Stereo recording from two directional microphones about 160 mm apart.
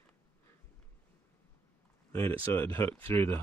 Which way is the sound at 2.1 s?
15° left (ahead or behind).